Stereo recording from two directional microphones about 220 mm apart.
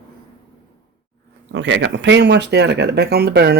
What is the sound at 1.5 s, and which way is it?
Speech, 55° right (ahead or behind).